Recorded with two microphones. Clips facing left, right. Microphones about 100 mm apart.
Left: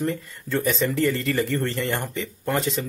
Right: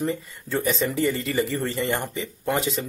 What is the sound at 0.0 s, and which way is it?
Speech, 5° right (ahead or behind).